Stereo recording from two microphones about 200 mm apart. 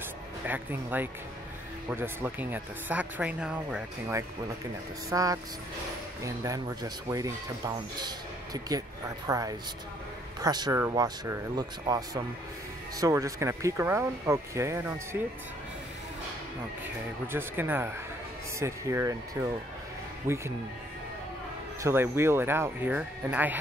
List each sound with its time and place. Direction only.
0.5 s speech: 10° right (ahead or behind)
5.1 s speech: 15° right (ahead or behind)
17.3 s speech: 10° right (ahead or behind)
21.8 s speech: 10° right (ahead or behind)